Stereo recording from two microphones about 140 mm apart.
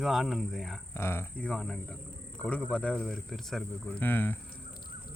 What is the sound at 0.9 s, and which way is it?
Speech, 15° left (ahead or behind).